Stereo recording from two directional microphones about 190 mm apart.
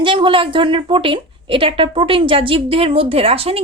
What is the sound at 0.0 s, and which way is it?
A woman's voice, 25° right (ahead or behind).